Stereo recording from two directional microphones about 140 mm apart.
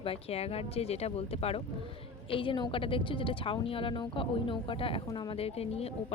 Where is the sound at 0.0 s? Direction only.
45° left (ahead or behind).